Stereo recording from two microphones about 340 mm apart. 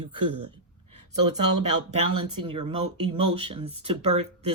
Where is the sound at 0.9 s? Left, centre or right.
Right.